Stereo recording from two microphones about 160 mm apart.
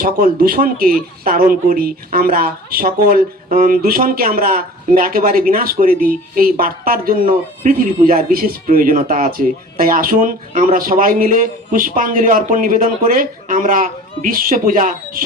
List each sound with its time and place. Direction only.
0.0 s speech: 65° right (ahead or behind)